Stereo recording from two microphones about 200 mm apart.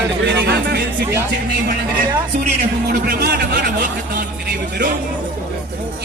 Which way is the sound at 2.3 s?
45° right (ahead or behind).